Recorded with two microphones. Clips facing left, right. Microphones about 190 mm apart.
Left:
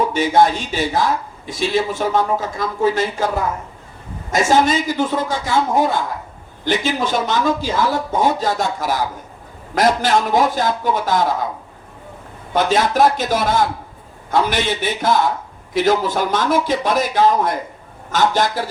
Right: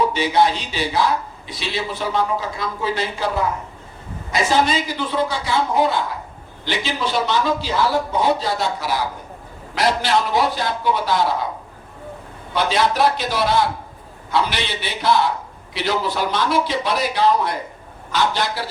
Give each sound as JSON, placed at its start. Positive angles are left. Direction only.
{"t": 0.1, "sound": "speech", "side_deg": 50}
{"t": 12.5, "sound": "speech", "side_deg": 45}